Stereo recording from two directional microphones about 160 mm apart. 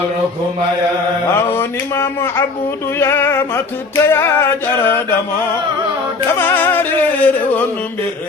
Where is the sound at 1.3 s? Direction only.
15° left (ahead or behind).